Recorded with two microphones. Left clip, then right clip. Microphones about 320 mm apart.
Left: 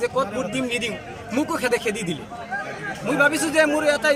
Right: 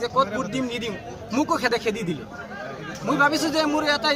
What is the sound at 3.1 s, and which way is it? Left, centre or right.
Speech, centre.